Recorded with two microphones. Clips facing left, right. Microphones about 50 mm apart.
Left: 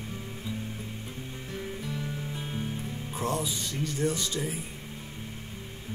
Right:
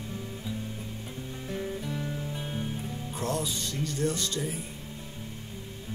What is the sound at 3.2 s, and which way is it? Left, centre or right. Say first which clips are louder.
Speech: left 1 dB; centre.